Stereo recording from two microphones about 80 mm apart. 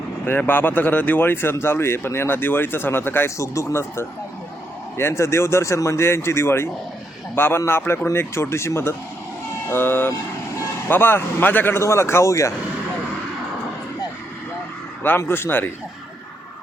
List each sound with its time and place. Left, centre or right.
0.3 s speech: left
15.0 s speech: left